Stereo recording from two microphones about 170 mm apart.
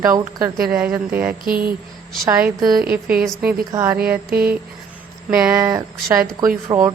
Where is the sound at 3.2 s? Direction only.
5° right (ahead or behind).